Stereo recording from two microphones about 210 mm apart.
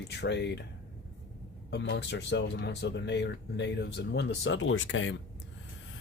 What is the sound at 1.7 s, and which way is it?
Speech, 55° left (ahead or behind).